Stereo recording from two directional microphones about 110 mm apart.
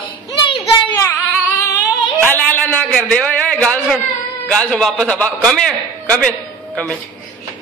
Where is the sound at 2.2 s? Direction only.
15° left (ahead or behind).